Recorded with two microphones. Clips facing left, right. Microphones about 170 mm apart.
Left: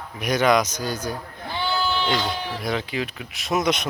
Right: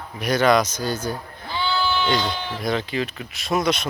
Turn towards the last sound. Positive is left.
turn(degrees=20)  # may be behind; listen again after turning